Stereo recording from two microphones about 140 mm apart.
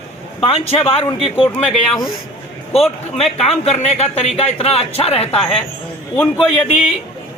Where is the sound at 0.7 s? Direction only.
40° left (ahead or behind).